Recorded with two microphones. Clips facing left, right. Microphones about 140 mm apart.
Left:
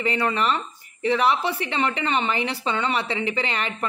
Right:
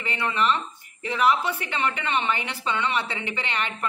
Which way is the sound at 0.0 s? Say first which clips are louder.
Left 3 dB; 35° left (ahead or behind).